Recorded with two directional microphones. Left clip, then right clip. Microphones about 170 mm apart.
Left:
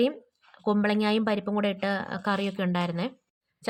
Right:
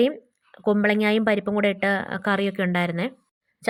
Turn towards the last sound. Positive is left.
turn(degrees=-25)  # may be behind; listen again after turning